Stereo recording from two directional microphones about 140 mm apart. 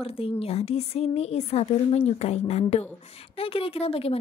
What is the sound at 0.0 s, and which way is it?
A woman's voice, 45° left (ahead or behind).